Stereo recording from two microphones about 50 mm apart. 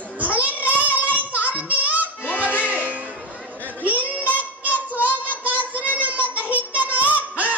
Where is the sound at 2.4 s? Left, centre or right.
Left.